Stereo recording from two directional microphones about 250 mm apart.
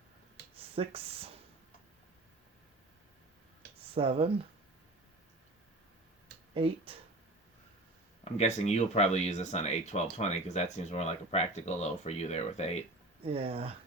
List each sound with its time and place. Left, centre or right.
0.5 s speech: right
3.9 s speech: right
6.5 s speech: right
8.2 s speech: left
13.2 s speech: right